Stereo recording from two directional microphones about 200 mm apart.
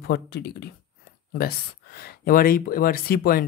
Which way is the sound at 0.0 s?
55° left (ahead or behind).